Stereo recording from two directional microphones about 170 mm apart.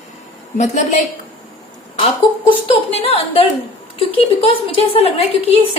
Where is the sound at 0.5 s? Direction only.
45° left (ahead or behind).